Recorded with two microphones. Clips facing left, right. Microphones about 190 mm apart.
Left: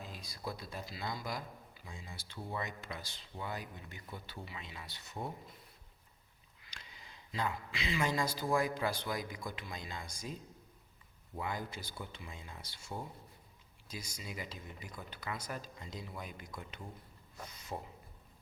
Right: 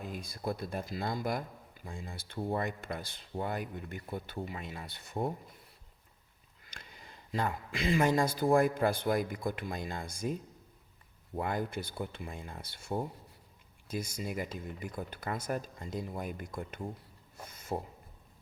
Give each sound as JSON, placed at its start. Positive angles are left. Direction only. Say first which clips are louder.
{"t": 0.0, "sound": "a man's voice", "louder": "right 6 dB", "side_deg": -55}
{"t": 6.6, "sound": "speech", "louder": "right 4 dB", "side_deg": -50}
{"t": 11.3, "sound": "a man's voice", "louder": "right 7 dB", "side_deg": -55}
{"t": 17.4, "sound": "a sound", "louder": "right 6 dB", "side_deg": -50}